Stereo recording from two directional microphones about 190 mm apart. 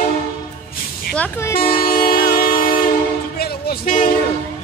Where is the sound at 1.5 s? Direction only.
50° left (ahead or behind).